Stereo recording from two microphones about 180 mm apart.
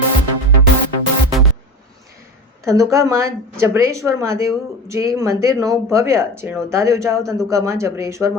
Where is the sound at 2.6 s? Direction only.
20° right (ahead or behind).